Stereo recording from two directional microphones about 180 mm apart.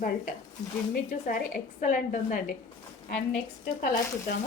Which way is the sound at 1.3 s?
45° left (ahead or behind).